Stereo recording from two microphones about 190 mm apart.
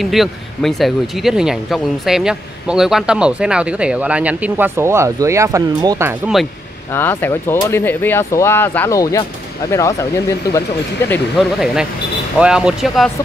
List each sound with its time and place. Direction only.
0.0 s speech: centre (ahead or behind)
6.9 s speech: 10° left (ahead or behind)
11.3 s speech: 5° right (ahead or behind)